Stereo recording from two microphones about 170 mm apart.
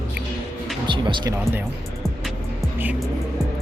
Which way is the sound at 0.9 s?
30° right (ahead or behind).